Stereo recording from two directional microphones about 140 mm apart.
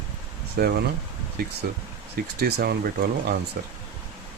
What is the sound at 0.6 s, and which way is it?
Speech, 90° right.